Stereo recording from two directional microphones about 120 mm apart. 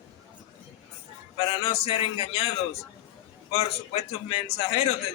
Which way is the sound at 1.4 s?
45° left (ahead or behind).